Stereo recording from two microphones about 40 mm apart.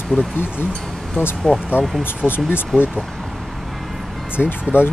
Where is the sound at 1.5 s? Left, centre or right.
Left.